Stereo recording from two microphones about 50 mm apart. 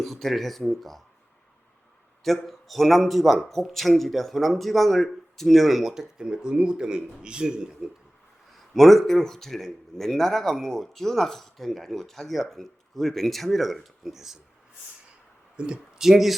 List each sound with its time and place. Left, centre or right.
0.0 s a man's voice: centre
2.2 s a man's voice: centre
6.1 s speech: centre
8.5 s a man's voice: centre
15.5 s speech: centre
16.0 s a man's voice: centre